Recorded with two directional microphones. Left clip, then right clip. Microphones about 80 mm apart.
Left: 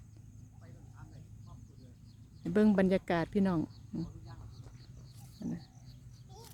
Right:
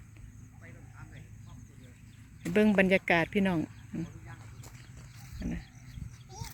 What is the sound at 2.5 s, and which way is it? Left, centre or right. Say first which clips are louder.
Speech: right 4 dB; left.